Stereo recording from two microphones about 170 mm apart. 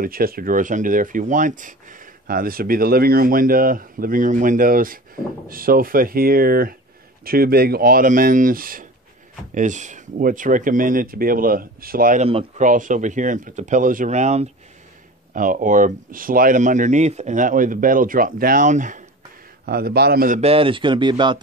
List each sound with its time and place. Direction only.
0.0 s speech: 60° right (ahead or behind)
12.2 s speech: 35° right (ahead or behind)
12.6 s speech: 50° right (ahead or behind)
15.3 s speech: 50° right (ahead or behind)
19.6 s speech: 65° right (ahead or behind)
20.3 s a man's voice: 35° right (ahead or behind)